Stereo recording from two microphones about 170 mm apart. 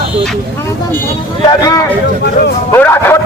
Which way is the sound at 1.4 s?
20° left (ahead or behind).